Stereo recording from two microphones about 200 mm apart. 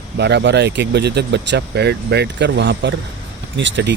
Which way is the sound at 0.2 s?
60° right (ahead or behind).